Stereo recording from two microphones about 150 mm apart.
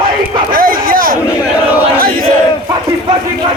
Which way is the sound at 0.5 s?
70° right (ahead or behind).